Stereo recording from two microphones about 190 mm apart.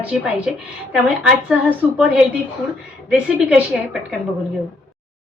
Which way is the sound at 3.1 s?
5° right (ahead or behind).